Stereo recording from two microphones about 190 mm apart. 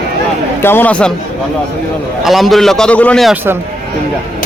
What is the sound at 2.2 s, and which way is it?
A man's voice, centre (ahead or behind).